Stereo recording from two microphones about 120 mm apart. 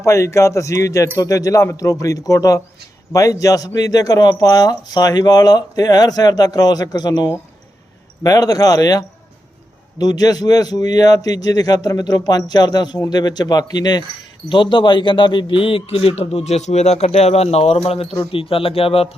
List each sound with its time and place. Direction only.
0.0 s a man's voice: 25° left (ahead or behind); by 19.1 s 55° left (ahead or behind)